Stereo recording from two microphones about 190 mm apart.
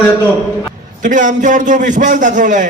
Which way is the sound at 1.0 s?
40° right (ahead or behind).